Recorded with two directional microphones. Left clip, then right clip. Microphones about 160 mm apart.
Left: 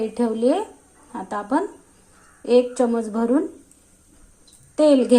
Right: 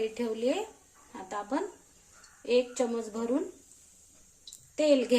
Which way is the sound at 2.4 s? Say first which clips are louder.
Left 10 dB; 25° left (ahead or behind).